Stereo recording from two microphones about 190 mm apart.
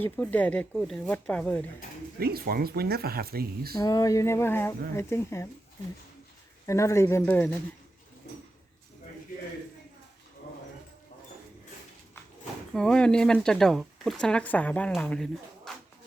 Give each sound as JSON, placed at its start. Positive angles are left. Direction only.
{"t": 0.0, "sound": "speech", "side_deg": 10}
{"t": 2.1, "sound": "speech", "side_deg": -55}
{"t": 3.8, "sound": "speech", "side_deg": 20}
{"t": 6.7, "sound": "speech", "side_deg": 15}
{"t": 12.7, "sound": "speech", "side_deg": 5}